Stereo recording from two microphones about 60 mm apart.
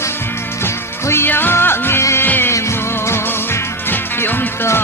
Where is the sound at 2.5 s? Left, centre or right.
Left.